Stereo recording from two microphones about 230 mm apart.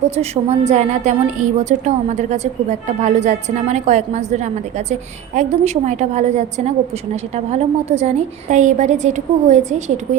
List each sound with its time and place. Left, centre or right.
0.2 s a woman's voice: right